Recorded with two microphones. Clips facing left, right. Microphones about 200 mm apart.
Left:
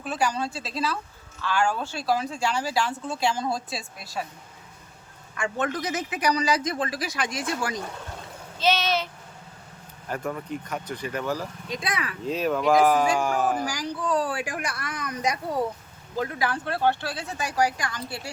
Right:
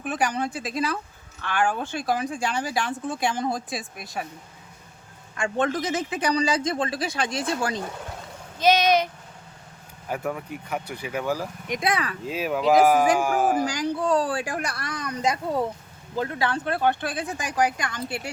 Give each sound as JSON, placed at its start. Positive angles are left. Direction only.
{"t": 0.2, "sound": "speech", "side_deg": -20}
{"t": 1.4, "sound": "speech", "side_deg": -55}
{"t": 1.8, "sound": "a man's voice", "side_deg": -20}
{"t": 5.3, "sound": "a man's voice", "side_deg": -30}
{"t": 8.5, "sound": "speech", "side_deg": -15}
{"t": 10.1, "sound": "speech", "side_deg": -10}
{"t": 11.8, "sound": "a man's voice", "side_deg": -25}
{"t": 12.3, "sound": "speech", "side_deg": -5}
{"t": 13.7, "sound": "a man's voice", "side_deg": -25}